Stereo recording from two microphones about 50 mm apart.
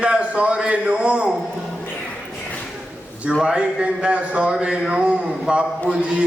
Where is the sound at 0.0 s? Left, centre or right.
Right.